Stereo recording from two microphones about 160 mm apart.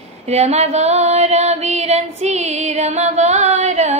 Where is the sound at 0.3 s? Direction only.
45° right (ahead or behind).